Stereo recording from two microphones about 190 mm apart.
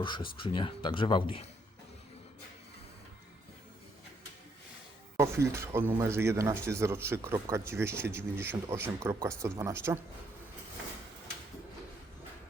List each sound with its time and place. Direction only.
0.3 s speech: 25° left (ahead or behind)
5.1 s speech: 15° right (ahead or behind)